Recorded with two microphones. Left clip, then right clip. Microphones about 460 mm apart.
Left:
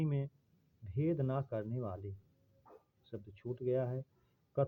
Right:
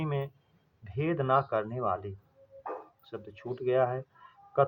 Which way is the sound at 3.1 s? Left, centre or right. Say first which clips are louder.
Right 5 dB; left.